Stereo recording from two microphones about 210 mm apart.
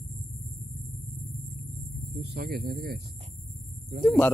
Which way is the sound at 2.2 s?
50° right (ahead or behind).